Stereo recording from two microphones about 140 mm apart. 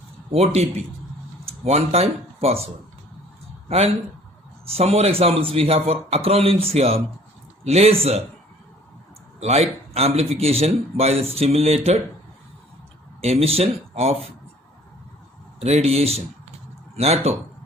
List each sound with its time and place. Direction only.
0.3 s a man's voice: 50° right (ahead or behind)
3.7 s a man's voice: 45° right (ahead or behind)
9.4 s a man's voice: 50° right (ahead or behind)
13.2 s a man's voice: 45° right (ahead or behind)
15.6 s a man's voice: 50° right (ahead or behind)